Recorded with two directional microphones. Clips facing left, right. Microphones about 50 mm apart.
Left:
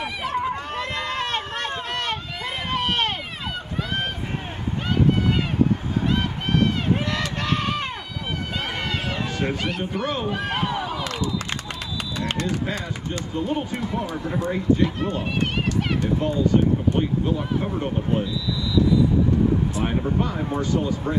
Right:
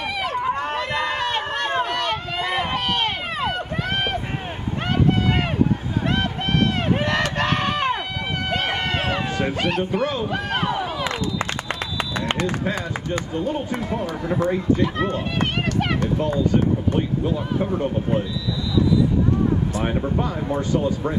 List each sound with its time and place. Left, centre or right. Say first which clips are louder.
3.4 s run: right 3 dB; right
6.1 s run: right 3 dB; right
8.5 s run: right 6 dB; right
9.6 s speech: right 5 dB; right
13.8 s speech: right 2 dB; right